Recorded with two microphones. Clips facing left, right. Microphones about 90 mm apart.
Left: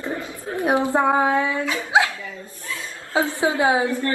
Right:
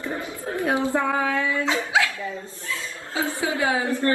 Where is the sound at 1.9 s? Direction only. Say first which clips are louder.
Left 5 dB; 20° left (ahead or behind).